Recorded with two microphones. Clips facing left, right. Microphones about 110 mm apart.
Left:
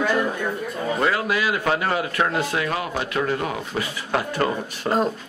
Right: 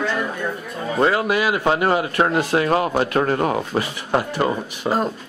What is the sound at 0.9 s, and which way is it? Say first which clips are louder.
A man's voice: right 5 dB; 30° right (ahead or behind).